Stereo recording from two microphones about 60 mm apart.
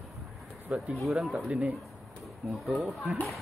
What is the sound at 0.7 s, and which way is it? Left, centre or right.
Speech, right.